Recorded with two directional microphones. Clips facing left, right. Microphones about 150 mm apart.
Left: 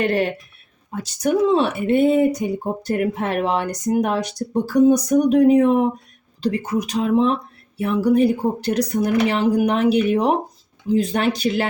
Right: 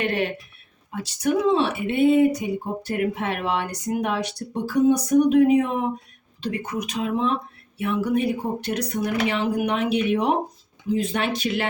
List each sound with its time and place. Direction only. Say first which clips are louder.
0.0 s a woman's voice: left 5 dB; 40° left (ahead or behind)
6.9 s a woman's voice: left 6 dB; 35° left (ahead or behind)